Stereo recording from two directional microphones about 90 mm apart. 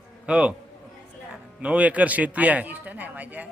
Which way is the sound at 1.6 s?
15° right (ahead or behind).